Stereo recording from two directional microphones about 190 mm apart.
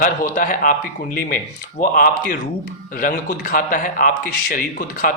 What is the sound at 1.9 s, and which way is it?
A man's voice, 50° left (ahead or behind).